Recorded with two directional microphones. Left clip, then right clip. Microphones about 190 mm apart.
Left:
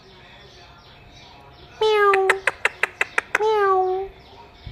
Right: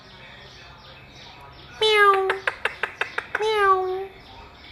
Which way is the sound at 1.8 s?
20° left (ahead or behind).